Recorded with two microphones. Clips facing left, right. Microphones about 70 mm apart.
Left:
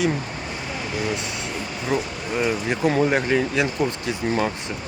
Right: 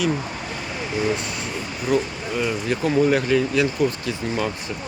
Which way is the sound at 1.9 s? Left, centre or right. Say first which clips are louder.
Right 3 dB; left.